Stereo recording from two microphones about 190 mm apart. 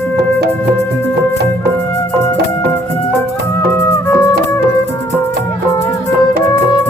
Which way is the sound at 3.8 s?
15° left (ahead or behind).